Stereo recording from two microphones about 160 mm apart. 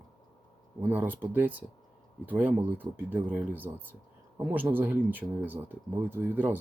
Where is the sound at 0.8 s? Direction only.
10° right (ahead or behind).